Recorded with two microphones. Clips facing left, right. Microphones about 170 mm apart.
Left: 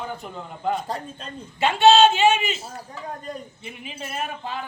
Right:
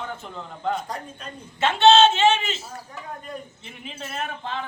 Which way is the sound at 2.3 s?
15° left (ahead or behind).